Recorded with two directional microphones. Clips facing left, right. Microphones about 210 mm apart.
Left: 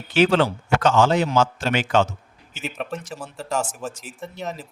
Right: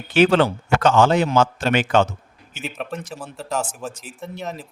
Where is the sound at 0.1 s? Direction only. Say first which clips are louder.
Right 2 dB; 55° right (ahead or behind).